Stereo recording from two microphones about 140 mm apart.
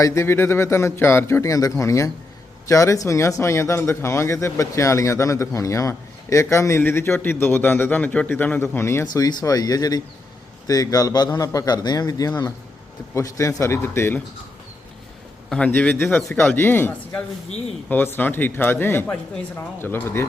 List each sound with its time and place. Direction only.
0.0 s speech: 20° left (ahead or behind)
15.4 s speech: 10° left (ahead or behind)